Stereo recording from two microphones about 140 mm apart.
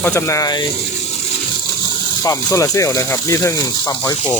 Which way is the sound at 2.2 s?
25° left (ahead or behind).